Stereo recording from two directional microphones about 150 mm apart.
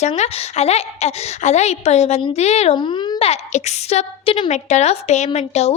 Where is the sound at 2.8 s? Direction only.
30° left (ahead or behind).